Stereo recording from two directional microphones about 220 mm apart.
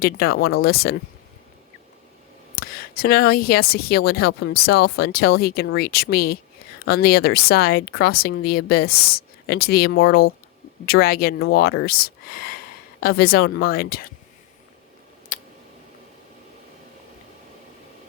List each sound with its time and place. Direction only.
0.0 s speech: 45° left (ahead or behind)
2.6 s speech: 45° left (ahead or behind)
15.3 s a sound: 35° left (ahead or behind)